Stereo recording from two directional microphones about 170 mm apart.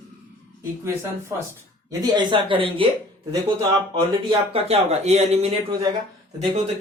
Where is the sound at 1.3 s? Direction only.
15° right (ahead or behind); by 2.8 s 30° right (ahead or behind).